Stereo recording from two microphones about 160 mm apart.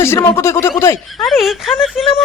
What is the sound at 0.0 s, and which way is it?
Speech, 15° left (ahead or behind).